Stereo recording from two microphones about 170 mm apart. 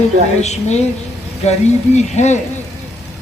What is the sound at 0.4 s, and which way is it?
A woman's voice, 40° left (ahead or behind).